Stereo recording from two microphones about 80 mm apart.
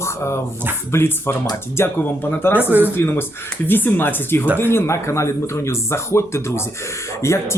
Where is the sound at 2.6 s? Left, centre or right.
Right.